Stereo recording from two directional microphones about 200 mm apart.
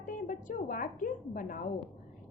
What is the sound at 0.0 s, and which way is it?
A woman's voice, 40° left (ahead or behind).